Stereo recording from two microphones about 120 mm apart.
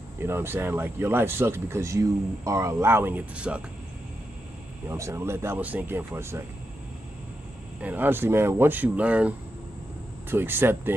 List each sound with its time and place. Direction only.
0.2 s speech: 20° right (ahead or behind)
4.8 s speech: 25° right (ahead or behind)
7.8 s speech: 15° right (ahead or behind)
10.3 s speech: 15° right (ahead or behind)